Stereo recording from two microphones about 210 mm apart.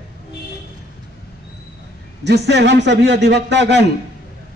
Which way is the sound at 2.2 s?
55° right (ahead or behind).